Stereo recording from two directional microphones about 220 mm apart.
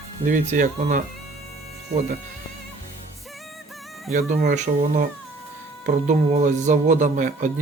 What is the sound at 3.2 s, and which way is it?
Music, centre (ahead or behind).